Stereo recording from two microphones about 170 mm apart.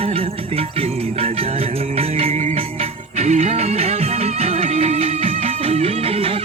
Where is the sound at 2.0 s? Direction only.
35° right (ahead or behind).